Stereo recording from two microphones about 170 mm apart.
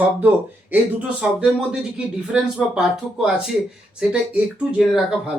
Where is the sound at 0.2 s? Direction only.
10° right (ahead or behind).